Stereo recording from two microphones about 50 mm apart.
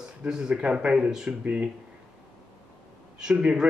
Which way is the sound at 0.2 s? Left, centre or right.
Centre.